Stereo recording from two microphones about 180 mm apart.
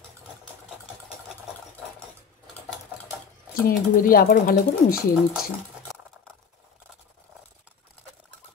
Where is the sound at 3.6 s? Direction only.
55° left (ahead or behind).